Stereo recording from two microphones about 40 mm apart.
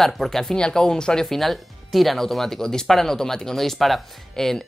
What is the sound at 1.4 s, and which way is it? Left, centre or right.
Speech, centre.